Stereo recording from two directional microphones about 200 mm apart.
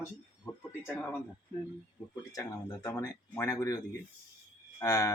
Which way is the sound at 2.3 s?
15° left (ahead or behind).